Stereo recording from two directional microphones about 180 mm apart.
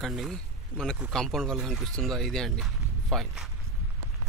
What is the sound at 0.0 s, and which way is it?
Speech, centre (ahead or behind).